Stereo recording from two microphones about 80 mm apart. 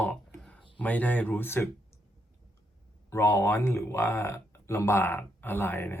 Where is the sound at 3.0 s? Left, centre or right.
Left.